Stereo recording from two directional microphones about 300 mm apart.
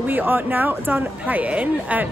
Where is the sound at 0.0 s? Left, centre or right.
Centre.